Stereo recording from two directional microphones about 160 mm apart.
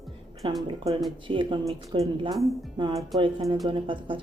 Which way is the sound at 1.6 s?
20° right (ahead or behind).